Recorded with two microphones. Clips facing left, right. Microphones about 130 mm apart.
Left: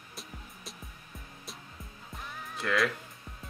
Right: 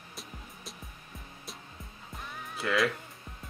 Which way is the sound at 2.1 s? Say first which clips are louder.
Even; centre (ahead or behind).